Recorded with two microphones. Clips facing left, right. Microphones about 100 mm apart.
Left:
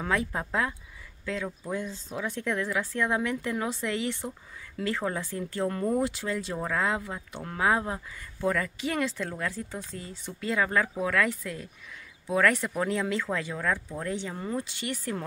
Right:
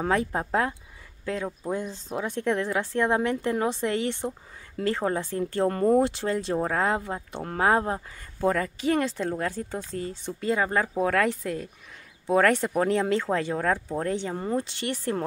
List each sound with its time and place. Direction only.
0.0 s speech: 40° right (ahead or behind)
2.4 s speech: 30° right (ahead or behind)
5.5 s speech: 45° right (ahead or behind)
9.1 s speech: 25° right (ahead or behind)
9.8 s speech: 45° right (ahead or behind)
10.4 s speech: 35° right (ahead or behind)
14.2 s speech: 30° right (ahead or behind)